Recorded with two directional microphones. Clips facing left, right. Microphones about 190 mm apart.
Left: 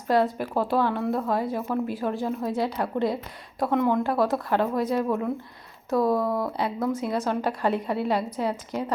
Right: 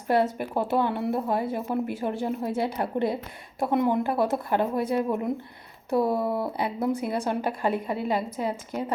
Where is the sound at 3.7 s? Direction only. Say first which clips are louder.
Even; 10° right (ahead or behind).